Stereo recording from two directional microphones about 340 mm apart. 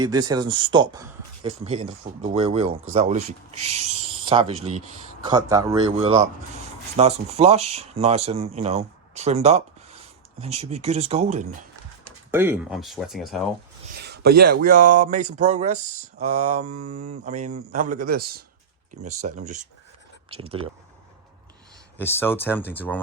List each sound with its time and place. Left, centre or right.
0.5 s a man's voice: centre
12.3 s speech: centre
13.9 s a sound: right
14.6 s a man's voice: right
21.9 s speech: centre